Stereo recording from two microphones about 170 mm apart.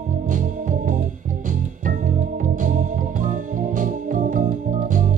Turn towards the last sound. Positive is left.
turn(degrees=-50)  # may be behind; listen again after turning